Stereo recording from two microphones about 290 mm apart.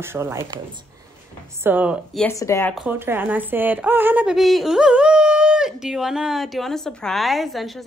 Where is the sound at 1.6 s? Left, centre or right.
Centre.